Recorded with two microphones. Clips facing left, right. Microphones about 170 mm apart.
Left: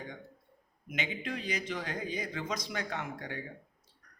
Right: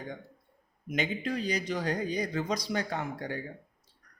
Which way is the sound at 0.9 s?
40° right (ahead or behind).